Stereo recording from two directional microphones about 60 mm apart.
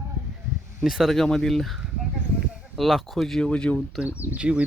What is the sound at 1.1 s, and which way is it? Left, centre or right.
Speech, centre.